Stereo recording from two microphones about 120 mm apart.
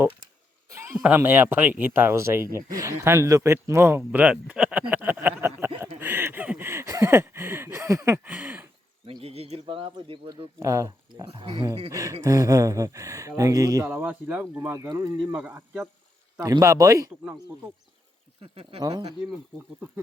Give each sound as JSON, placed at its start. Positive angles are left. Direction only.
{"t": 0.7, "sound": "a sound", "side_deg": -25}
{"t": 1.0, "sound": "speech", "side_deg": -15}
{"t": 9.2, "sound": "speech", "side_deg": -55}
{"t": 10.6, "sound": "speech", "side_deg": -25}
{"t": 10.8, "sound": "speech", "side_deg": -40}
{"t": 11.9, "sound": "speech", "side_deg": -30}
{"t": 13.8, "sound": "speech", "side_deg": -15}
{"t": 15.3, "sound": "speech", "side_deg": -15}
{"t": 18.4, "sound": "speech", "side_deg": -55}
{"t": 18.8, "sound": "speech", "side_deg": -35}